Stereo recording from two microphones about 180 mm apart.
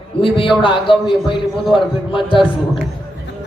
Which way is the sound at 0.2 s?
30° left (ahead or behind).